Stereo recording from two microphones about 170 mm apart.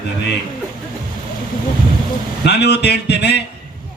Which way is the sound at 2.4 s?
80° left.